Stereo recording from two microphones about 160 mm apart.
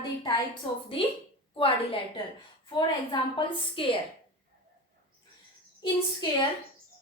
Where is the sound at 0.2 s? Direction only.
30° left (ahead or behind).